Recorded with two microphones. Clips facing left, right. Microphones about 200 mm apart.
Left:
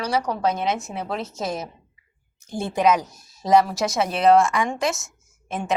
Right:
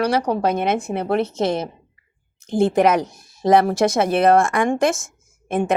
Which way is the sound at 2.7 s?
55° right (ahead or behind).